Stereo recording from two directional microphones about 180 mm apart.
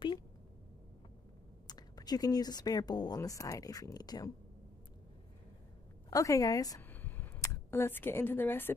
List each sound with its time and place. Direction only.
1.7 s speech: 20° left (ahead or behind)
6.0 s speech: 20° left (ahead or behind)